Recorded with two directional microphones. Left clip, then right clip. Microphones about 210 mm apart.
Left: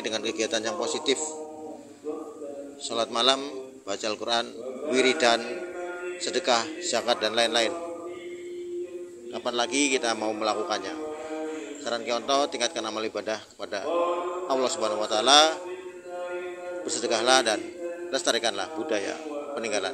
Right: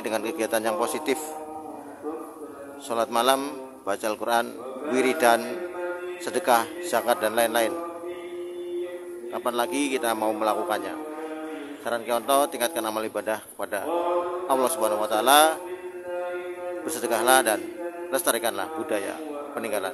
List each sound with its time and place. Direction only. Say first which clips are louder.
0.0 s a man's voice: right 1 dB; 15° right (ahead or behind)
2.9 s a man's voice: right 2 dB; 15° right (ahead or behind)
9.3 s a man's voice: right 1 dB; 15° right (ahead or behind)
11.8 s a man's voice: right 3 dB; 20° right (ahead or behind)
16.8 s a man's voice: right 1 dB; 20° right (ahead or behind)